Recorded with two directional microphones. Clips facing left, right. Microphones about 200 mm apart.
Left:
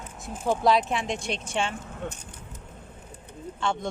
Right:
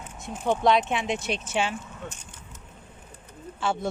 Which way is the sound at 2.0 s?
60° left (ahead or behind).